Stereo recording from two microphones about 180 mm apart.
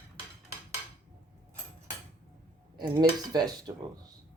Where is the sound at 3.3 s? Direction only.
20° right (ahead or behind).